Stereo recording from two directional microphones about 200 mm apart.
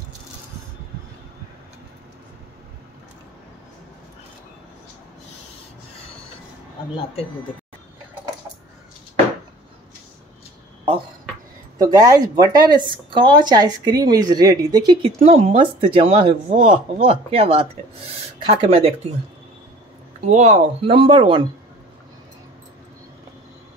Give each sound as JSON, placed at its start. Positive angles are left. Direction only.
{"t": 11.8, "sound": "speech", "side_deg": -20}
{"t": 16.4, "sound": "speech", "side_deg": -40}
{"t": 20.2, "sound": "speech", "side_deg": -35}